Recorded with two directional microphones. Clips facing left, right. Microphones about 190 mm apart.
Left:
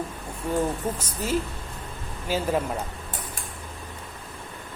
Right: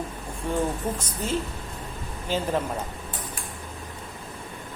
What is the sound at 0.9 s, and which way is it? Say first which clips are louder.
A man's voice: left 1 dB; 10° left (ahead or behind).